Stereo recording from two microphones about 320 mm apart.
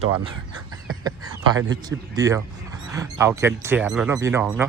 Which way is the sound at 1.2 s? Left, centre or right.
Right.